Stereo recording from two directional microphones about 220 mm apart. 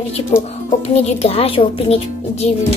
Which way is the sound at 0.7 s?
30° left (ahead or behind).